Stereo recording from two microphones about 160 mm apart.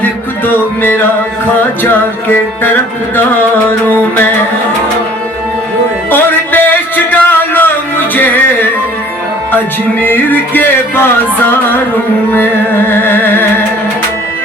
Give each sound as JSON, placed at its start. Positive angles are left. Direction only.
{"t": 0.0, "sound": "music", "side_deg": 10}
{"t": 6.1, "sound": "music", "side_deg": 10}